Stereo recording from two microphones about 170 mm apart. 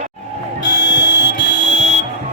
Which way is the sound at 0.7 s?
90° left.